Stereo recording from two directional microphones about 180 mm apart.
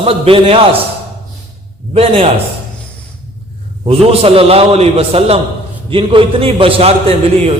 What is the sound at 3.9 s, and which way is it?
A man's voice, 30° right (ahead or behind).